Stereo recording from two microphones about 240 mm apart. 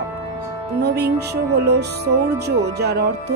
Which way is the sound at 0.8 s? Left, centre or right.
Right.